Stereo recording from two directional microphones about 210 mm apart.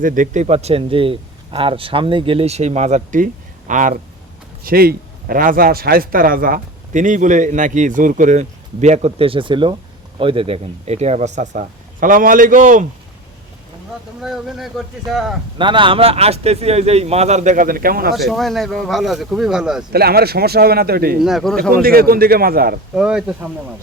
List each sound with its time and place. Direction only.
0.0 s a man's voice: 40° right (ahead or behind)
14.2 s speech: centre (ahead or behind)
15.5 s a man's voice: 25° right (ahead or behind); by 18.1 s 45° right (ahead or behind)
18.1 s speech: centre (ahead or behind)
19.9 s speech: 50° right (ahead or behind)
21.2 s speech: centre (ahead or behind)
21.7 s speech: 45° right (ahead or behind)
23.0 s speech: 5° right (ahead or behind)